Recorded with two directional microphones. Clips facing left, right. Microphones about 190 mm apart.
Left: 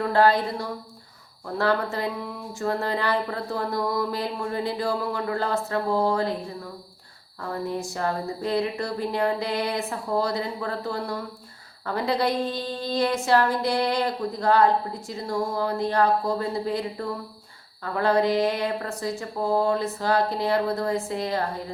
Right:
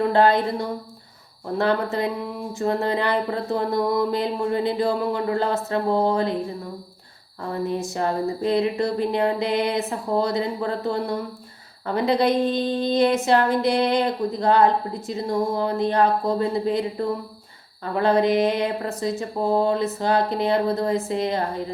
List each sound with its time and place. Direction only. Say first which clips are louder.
0.0 s a woman's voice: right 2 dB; 20° right (ahead or behind)
7.5 s a woman's voice: right 4 dB; 20° right (ahead or behind)